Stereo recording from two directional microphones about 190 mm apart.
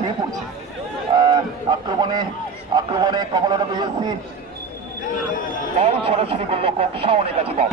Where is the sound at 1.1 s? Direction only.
25° right (ahead or behind).